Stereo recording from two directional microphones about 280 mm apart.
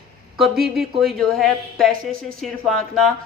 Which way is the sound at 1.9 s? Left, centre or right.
Right.